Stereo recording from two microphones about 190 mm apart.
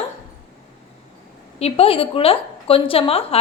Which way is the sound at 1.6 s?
30° left (ahead or behind).